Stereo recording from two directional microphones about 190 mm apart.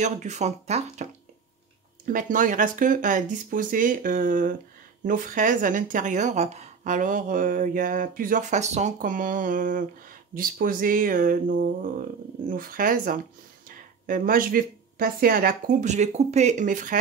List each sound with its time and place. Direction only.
0.0 s speech: 40° right (ahead or behind)
2.1 s speech: 45° right (ahead or behind)